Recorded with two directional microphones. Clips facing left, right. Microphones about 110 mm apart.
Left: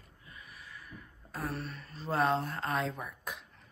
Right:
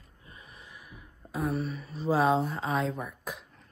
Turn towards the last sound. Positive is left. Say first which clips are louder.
# right 4 dB
turn(degrees=0)  # may be behind; listen again after turning